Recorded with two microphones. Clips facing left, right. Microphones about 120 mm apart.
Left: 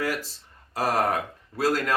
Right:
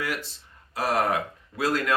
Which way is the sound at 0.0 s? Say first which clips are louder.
Left 3 dB; 40° left (ahead or behind).